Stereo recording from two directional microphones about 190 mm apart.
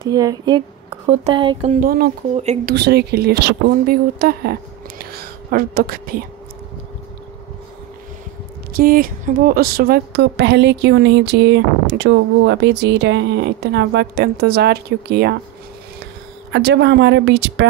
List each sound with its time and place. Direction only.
0.1 s speech: 20° right (ahead or behind)
1.8 s speech: 50° right (ahead or behind)
2.3 s speech: 35° right (ahead or behind)
2.7 s a woman's voice: 60° right (ahead or behind)
8.7 s a woman's voice: 50° right (ahead or behind)
16.5 s speech: 65° right (ahead or behind)